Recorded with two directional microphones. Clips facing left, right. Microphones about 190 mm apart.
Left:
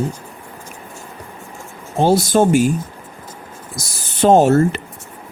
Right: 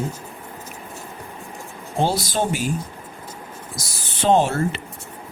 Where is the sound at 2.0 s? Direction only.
45° left (ahead or behind).